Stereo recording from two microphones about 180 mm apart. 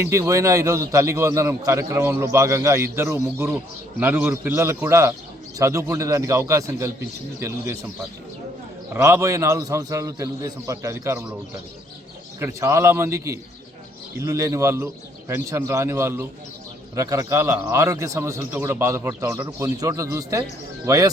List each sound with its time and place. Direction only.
0.0 s a man's voice: 15° right (ahead or behind)
12.4 s a man's voice: 15° right (ahead or behind)